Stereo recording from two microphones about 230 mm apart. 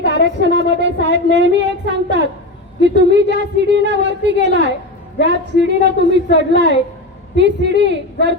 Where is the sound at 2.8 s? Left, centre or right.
Right.